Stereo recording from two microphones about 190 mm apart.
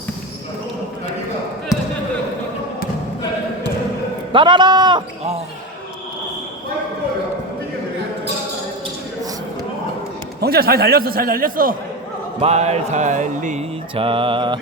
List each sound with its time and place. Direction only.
1.7 s basketball bounce: 20° left (ahead or behind)
4.3 s speech: 25° right (ahead or behind)
10.4 s a man's voice: 55° right (ahead or behind)
12.4 s mantra: 35° right (ahead or behind)